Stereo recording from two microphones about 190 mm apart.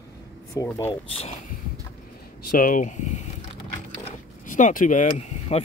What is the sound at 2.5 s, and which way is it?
Speech, 45° left (ahead or behind).